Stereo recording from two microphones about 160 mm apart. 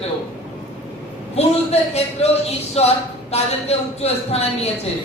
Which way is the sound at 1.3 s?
40° left (ahead or behind).